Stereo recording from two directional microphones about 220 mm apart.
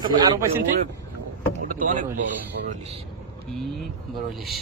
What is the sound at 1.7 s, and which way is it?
Speech, 35° right (ahead or behind).